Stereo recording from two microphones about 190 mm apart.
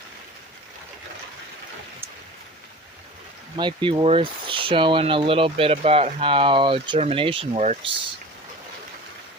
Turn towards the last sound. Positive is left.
turn(degrees=-30)  # may be behind; listen again after turning